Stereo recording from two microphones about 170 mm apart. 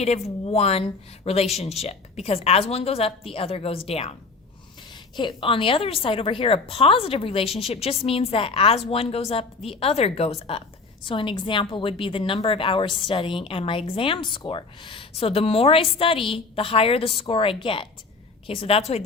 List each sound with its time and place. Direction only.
0.0 s a woman's voice: 40° left (ahead or behind)
5.1 s a woman's voice: 30° left (ahead or behind)